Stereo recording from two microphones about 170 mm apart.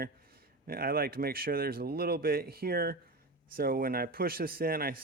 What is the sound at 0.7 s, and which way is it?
Speech, 60° right (ahead or behind).